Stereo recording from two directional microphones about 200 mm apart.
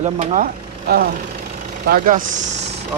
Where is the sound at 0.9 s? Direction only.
50° right (ahead or behind).